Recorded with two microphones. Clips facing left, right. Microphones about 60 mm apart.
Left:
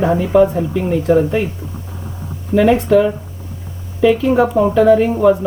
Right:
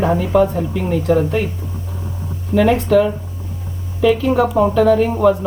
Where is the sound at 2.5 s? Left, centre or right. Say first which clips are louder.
Left 2 dB; centre.